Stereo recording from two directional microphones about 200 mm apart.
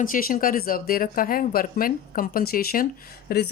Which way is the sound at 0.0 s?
45° left (ahead or behind).